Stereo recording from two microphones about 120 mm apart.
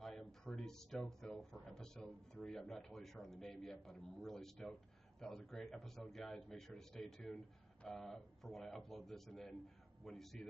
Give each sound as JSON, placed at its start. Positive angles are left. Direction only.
{"t": 0.0, "sound": "a man's voice", "side_deg": 5}